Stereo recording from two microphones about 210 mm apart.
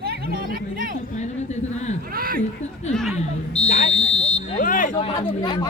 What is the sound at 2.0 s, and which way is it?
Speech, 45° right (ahead or behind).